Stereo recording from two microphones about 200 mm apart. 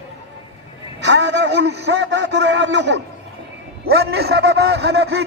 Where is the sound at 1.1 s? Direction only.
60° right (ahead or behind).